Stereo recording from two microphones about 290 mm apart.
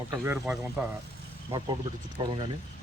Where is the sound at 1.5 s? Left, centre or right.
Centre.